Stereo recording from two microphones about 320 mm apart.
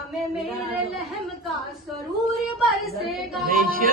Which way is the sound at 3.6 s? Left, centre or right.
Right.